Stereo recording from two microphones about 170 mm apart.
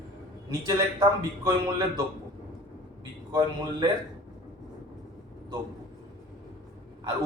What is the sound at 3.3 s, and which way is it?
Speech, 20° right (ahead or behind).